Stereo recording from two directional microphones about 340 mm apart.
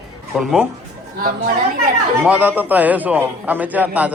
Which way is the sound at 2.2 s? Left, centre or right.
Centre.